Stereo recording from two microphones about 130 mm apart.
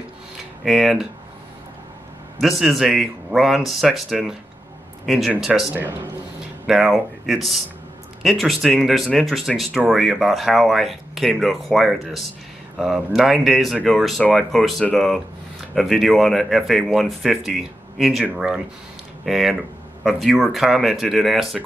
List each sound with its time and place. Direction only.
0.7 s speech: centre (ahead or behind)
2.4 s speech: centre (ahead or behind)
5.7 s a man's voice: 15° right (ahead or behind)
6.7 s speech: centre (ahead or behind)